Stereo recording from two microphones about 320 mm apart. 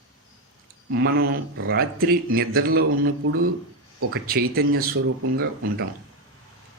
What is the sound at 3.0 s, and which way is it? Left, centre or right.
Speech, right.